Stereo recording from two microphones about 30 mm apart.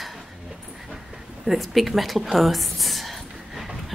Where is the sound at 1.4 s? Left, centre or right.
Centre.